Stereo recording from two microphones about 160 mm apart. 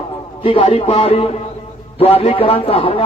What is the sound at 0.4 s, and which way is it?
Speech, 35° left (ahead or behind).